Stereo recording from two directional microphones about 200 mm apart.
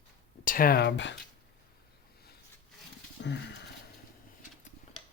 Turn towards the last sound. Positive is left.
turn(degrees=60)  # may be behind; listen again after turning